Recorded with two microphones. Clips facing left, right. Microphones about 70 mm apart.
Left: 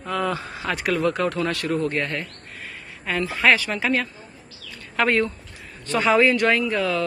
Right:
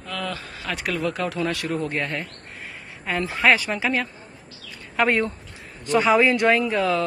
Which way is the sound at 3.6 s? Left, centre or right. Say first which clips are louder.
Left 1 dB; centre.